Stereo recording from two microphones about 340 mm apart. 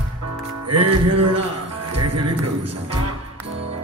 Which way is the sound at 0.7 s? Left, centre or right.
Right.